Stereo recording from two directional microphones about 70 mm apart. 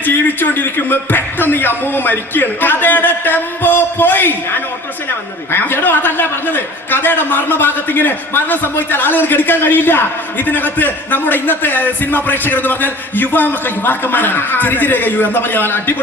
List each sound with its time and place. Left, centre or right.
0.0 s a man's voice: left